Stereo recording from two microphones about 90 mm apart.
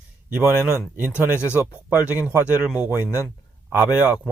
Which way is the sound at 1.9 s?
15° right (ahead or behind).